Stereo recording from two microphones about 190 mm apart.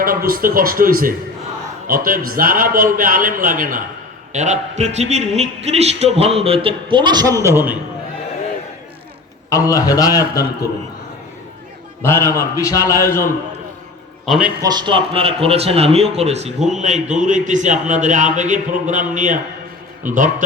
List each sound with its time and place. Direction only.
0.0 s a man's voice: 50° right (ahead or behind); by 7.8 s 10° right (ahead or behind)
9.5 s a man's voice: 15° left (ahead or behind)
12.0 s a man's voice: 15° left (ahead or behind)
14.3 s a man's voice: 5° right (ahead or behind)
14.6 s a man's voice: 20° right (ahead or behind); by 20.3 s 45° right (ahead or behind)